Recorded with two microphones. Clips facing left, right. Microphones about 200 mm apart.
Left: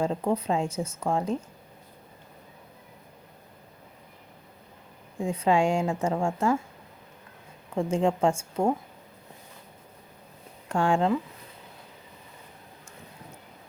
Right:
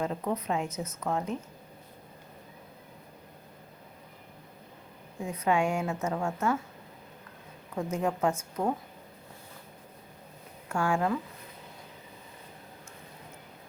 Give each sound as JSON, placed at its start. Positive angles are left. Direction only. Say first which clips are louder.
{"t": 0.0, "sound": "a woman's voice", "louder": "left 5 dB", "side_deg": 30}
{"t": 5.1, "sound": "a woman's voice", "louder": "left 4 dB", "side_deg": 30}
{"t": 7.8, "sound": "a woman's voice", "louder": "left 5 dB", "side_deg": 30}
{"t": 10.7, "sound": "speech", "louder": "left 4 dB", "side_deg": 30}